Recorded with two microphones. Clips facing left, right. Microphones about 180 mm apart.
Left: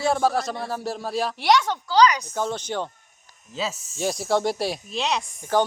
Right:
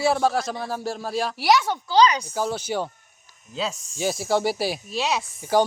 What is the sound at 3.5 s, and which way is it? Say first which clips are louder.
Speech: right 1 dB; 5° left (ahead or behind).